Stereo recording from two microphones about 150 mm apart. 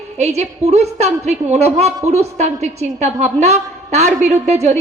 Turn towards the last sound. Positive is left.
turn(degrees=-45)  # may be behind; listen again after turning